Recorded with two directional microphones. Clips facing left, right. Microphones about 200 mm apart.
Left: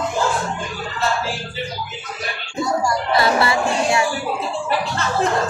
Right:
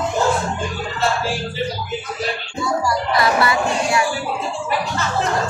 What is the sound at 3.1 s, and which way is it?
Music, 25° left (ahead or behind).